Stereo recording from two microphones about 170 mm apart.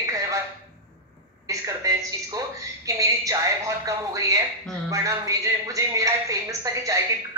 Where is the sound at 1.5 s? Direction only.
20° right (ahead or behind).